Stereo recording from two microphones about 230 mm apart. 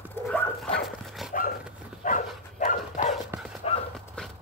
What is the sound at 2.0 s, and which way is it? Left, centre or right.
Dog, left.